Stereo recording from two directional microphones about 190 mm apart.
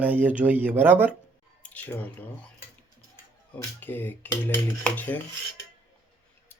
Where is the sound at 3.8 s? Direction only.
10° left (ahead or behind).